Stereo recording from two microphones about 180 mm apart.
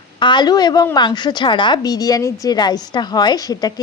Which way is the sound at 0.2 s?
25° left (ahead or behind).